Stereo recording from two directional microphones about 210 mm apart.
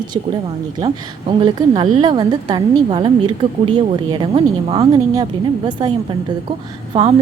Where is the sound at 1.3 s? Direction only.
20° right (ahead or behind).